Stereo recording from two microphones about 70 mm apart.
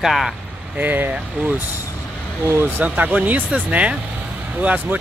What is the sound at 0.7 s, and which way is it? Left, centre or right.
Speech, right.